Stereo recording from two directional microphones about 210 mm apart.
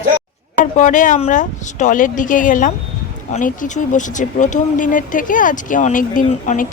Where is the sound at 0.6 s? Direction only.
35° left (ahead or behind).